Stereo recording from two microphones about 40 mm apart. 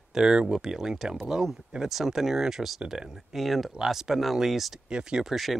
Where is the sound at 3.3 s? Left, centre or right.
Centre.